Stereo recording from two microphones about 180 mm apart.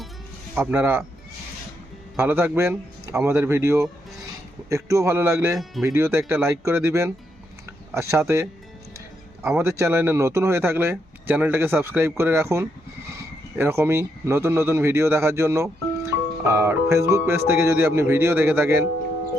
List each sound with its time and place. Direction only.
0.5 s speech: 10° right (ahead or behind)
2.1 s speech: 10° right (ahead or behind)
9.4 s a man's voice: 5° right (ahead or behind)
9.6 s speech: 15° right (ahead or behind)